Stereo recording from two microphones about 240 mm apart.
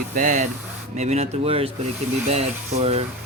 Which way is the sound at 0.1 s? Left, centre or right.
Right.